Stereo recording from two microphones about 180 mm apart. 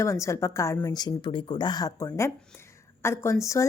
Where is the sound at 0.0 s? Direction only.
15° left (ahead or behind).